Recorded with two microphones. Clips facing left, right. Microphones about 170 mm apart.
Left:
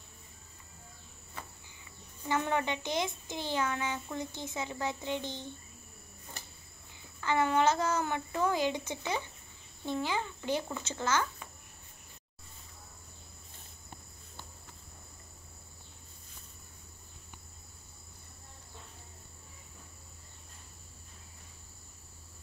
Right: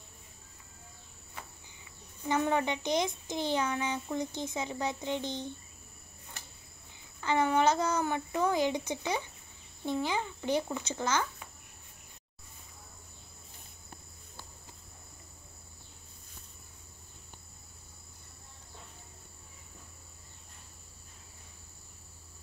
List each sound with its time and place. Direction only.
2.2 s a child's voice: 15° right (ahead or behind)
7.2 s a child's voice: 20° right (ahead or behind)